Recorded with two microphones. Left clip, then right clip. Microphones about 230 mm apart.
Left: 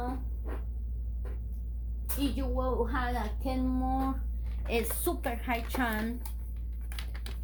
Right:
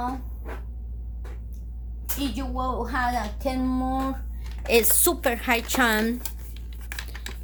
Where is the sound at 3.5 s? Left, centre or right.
Right.